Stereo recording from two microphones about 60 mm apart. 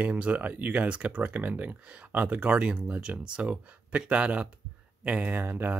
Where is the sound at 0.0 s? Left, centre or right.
Right.